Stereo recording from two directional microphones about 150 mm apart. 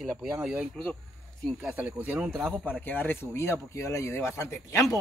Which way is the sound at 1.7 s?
10° right (ahead or behind).